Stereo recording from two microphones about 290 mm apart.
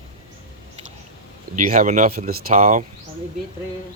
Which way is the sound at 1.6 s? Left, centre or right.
Right.